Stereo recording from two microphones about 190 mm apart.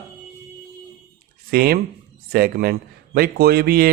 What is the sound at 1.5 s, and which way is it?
A man's voice, 50° right (ahead or behind).